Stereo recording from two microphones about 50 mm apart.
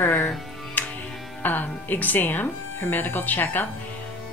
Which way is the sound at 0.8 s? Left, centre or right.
Left.